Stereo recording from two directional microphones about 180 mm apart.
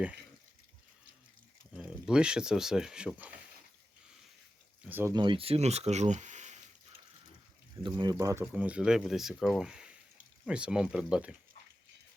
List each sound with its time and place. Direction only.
1.7 s speech: centre (ahead or behind)
4.8 s speech: 10° right (ahead or behind)
5.1 s speech: 25° right (ahead or behind)
7.9 s speech: 25° right (ahead or behind)
8.1 s speech: 15° right (ahead or behind)